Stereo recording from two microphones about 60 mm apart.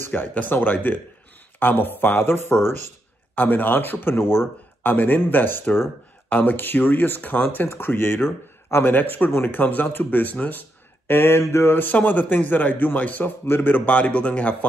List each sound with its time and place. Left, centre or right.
0.1 s speech: left
3.3 s a man's voice: left
11.1 s speech: left
11.9 s a man's voice: left